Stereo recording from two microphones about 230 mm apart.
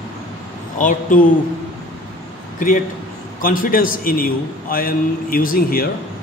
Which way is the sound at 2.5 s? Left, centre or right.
Left.